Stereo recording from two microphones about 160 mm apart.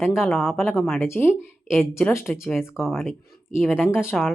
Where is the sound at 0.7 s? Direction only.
Centre (ahead or behind).